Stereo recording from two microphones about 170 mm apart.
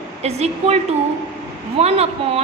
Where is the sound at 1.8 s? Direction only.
35° right (ahead or behind).